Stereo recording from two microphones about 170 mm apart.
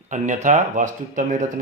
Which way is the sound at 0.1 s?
45° right (ahead or behind).